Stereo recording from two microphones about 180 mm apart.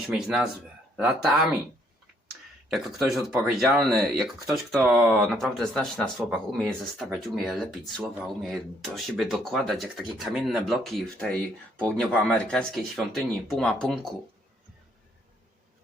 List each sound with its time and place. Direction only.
0.1 s speech: centre (ahead or behind)
2.6 s speech: centre (ahead or behind)